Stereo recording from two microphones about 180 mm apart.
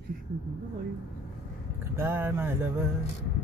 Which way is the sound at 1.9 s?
15° right (ahead or behind).